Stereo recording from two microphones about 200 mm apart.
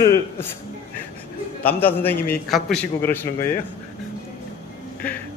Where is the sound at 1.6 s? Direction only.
10° left (ahead or behind).